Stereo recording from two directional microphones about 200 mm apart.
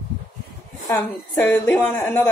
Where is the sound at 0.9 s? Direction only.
10° left (ahead or behind).